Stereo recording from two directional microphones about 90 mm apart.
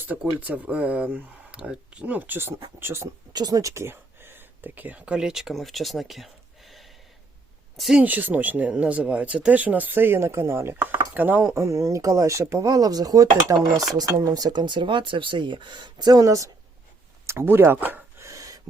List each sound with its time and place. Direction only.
0.2 s speech: 15° right (ahead or behind)
3.3 s speech: 45° right (ahead or behind)
3.8 s speech: 25° right (ahead or behind); by 8.0 s 5° right (ahead or behind)
8.0 s speech: 20° right (ahead or behind)
11.4 s speech: 35° right (ahead or behind)
17.2 s speech: 25° right (ahead or behind)
18.2 s gasp: 35° right (ahead or behind)